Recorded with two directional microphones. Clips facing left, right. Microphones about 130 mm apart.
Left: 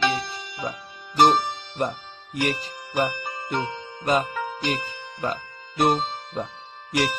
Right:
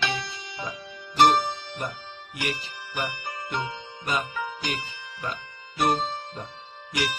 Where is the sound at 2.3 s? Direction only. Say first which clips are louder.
Left 6 dB; 40° left (ahead or behind).